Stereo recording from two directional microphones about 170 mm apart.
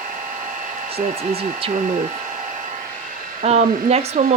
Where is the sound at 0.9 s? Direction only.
35° right (ahead or behind).